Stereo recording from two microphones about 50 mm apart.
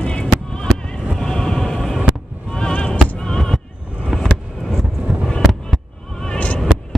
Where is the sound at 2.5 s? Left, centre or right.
Centre.